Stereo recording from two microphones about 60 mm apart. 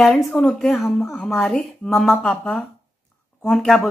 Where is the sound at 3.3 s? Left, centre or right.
Centre.